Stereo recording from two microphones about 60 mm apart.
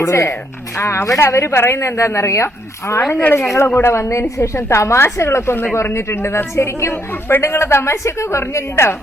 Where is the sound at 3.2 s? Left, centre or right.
Left.